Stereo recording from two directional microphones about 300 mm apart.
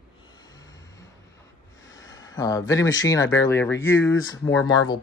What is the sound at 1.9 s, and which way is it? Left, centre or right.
Speech, centre.